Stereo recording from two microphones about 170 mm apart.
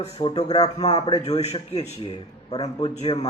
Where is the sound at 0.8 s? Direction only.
35° left (ahead or behind).